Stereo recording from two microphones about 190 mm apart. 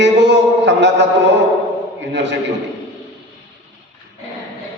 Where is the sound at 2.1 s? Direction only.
70° right (ahead or behind).